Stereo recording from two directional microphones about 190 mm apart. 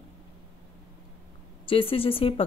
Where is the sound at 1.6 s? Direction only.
30° left (ahead or behind).